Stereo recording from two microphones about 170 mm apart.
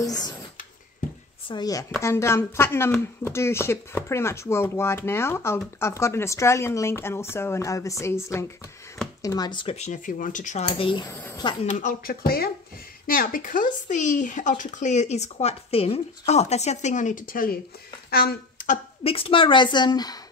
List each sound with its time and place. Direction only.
0.0 s speech: 20° left (ahead or behind)
1.5 s a woman's voice: 20° left (ahead or behind); by 10.7 s 45° left (ahead or behind)
10.7 s a woman's voice: 30° left (ahead or behind)
11.1 s speech: 10° left (ahead or behind)
11.6 s speech: 45° left (ahead or behind)
19.0 s a woman's voice: 35° left (ahead or behind)